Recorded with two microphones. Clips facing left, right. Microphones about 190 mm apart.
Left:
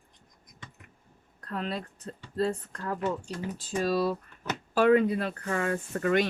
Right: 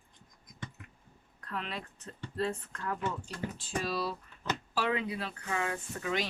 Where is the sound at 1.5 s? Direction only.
40° left (ahead or behind).